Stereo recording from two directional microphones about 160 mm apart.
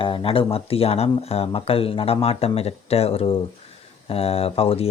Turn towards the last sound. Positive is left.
turn(degrees=35)  # may be behind; listen again after turning